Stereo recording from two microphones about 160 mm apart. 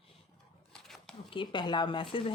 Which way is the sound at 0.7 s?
5° left (ahead or behind).